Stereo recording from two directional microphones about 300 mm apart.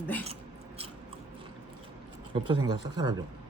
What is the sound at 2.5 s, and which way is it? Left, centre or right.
Speech, centre.